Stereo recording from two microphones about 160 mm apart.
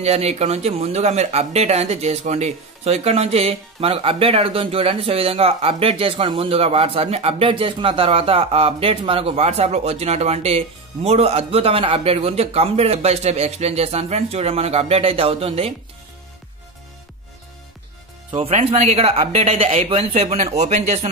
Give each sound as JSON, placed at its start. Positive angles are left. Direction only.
{"t": 0.0, "sound": "speech", "side_deg": -40}
{"t": 18.3, "sound": "speech", "side_deg": -40}